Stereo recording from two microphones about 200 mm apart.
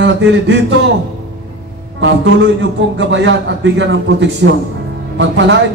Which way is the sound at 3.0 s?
65° right (ahead or behind).